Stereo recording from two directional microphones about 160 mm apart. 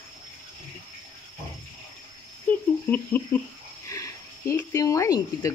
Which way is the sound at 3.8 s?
20° left (ahead or behind).